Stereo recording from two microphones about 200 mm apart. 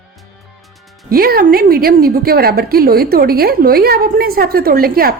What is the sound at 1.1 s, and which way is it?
A woman's voice, 50° right (ahead or behind).